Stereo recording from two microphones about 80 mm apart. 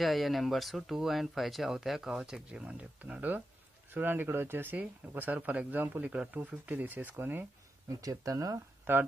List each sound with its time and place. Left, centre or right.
0.0 s speech: centre; by 7.4 s right
8.0 s speech: right
8.9 s speech: right